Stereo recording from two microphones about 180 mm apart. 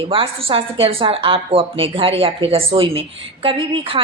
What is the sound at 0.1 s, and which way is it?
A woman's voice, 30° right (ahead or behind).